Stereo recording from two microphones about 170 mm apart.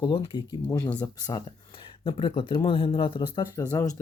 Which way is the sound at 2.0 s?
30° left (ahead or behind).